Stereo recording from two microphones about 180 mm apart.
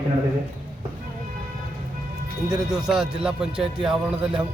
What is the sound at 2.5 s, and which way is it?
Speech, 5° right (ahead or behind).